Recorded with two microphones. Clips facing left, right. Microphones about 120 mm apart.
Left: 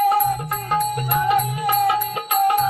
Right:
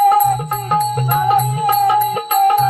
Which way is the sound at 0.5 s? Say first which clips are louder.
Right 5 dB; 50° right (ahead or behind).